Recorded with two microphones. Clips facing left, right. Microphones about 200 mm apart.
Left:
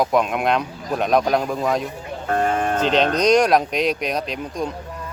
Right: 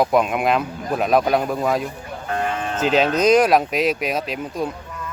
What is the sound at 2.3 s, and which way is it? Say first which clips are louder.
Sheep: left 4 dB; 45° left (ahead or behind).